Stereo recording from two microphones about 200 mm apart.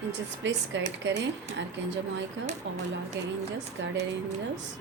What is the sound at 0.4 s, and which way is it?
Speech, 65° right (ahead or behind).